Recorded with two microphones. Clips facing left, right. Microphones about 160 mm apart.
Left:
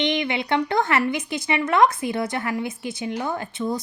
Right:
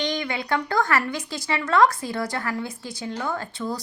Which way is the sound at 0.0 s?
25° left (ahead or behind).